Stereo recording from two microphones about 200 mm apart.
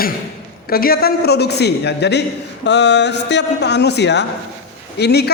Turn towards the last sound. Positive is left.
turn(degrees=55)  # may be behind; listen again after turning